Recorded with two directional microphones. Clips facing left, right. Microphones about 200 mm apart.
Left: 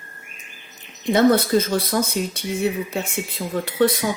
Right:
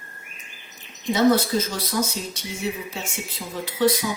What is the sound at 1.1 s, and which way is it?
Speech, 55° left (ahead or behind).